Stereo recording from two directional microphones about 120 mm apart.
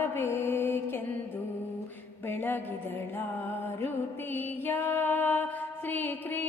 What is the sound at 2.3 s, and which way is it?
Music, 20° left (ahead or behind).